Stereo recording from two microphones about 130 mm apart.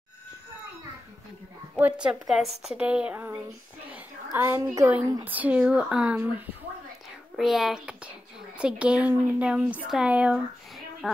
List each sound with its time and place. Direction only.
1.8 s speech: 10° right (ahead or behind)
3.9 s a sound: 15° right (ahead or behind)
4.7 s speech: 15° right (ahead or behind)
7.3 s speech: centre (ahead or behind)